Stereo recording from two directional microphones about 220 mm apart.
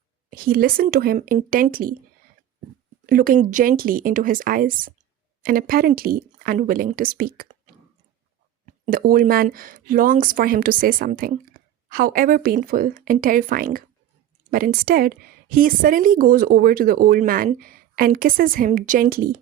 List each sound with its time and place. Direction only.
0.3 s speech: 40° right (ahead or behind)
3.1 s speech: 40° right (ahead or behind)
8.6 s speech: 40° right (ahead or behind)